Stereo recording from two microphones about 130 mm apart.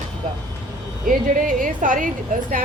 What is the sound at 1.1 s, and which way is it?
Speech, 90° right.